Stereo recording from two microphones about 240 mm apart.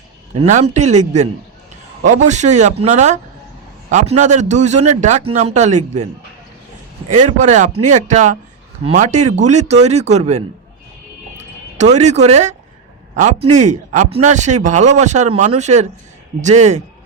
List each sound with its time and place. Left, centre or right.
0.7 s speech: right
7.1 s a man's voice: right
11.8 s speech: right